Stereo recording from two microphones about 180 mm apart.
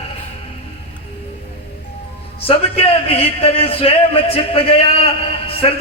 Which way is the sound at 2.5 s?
30° left (ahead or behind).